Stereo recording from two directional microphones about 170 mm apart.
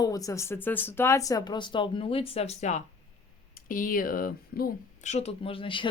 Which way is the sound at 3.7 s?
55° left (ahead or behind).